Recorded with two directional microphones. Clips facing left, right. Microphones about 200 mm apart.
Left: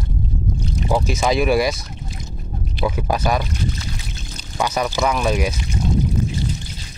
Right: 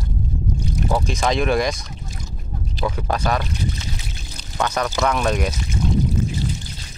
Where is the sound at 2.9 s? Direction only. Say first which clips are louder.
Left 2 dB; 10° left (ahead or behind).